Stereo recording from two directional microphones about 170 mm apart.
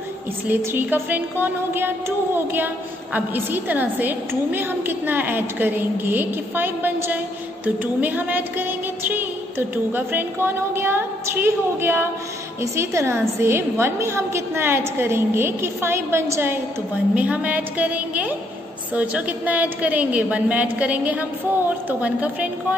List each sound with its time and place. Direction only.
0.5 s music: 15° right (ahead or behind)